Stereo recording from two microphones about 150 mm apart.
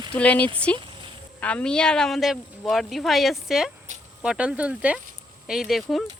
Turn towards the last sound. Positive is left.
turn(degrees=0)  # may be behind; listen again after turning